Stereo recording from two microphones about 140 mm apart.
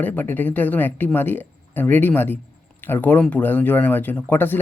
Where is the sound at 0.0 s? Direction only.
15° left (ahead or behind).